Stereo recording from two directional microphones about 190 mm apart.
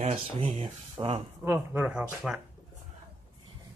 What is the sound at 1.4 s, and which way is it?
Speech, 10° right (ahead or behind).